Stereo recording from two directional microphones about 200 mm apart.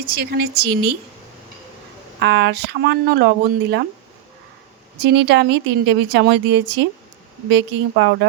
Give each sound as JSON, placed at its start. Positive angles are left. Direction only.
{"t": 0.1, "sound": "speech", "side_deg": -55}
{"t": 2.1, "sound": "speech", "side_deg": -60}
{"t": 4.9, "sound": "speech", "side_deg": -60}